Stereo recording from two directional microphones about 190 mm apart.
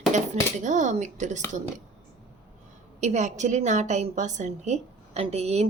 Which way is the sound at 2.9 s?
40° right (ahead or behind).